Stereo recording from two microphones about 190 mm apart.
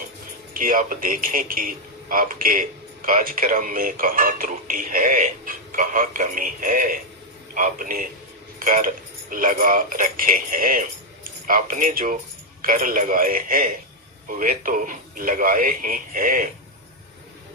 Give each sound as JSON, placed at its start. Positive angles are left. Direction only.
{"t": 0.5, "sound": "a man's voice", "side_deg": -45}